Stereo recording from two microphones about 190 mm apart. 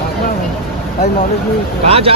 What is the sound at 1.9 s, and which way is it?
Speech, 30° right (ahead or behind).